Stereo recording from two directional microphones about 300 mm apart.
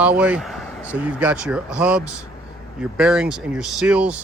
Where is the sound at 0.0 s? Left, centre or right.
Centre.